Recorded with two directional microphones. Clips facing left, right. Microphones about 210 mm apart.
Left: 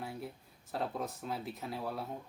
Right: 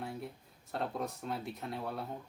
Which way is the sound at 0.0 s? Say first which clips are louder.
Right 1 dB; centre (ahead or behind).